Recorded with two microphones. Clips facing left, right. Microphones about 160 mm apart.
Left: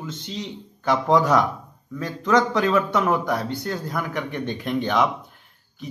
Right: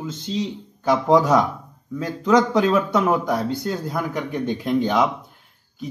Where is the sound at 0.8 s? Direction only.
20° right (ahead or behind).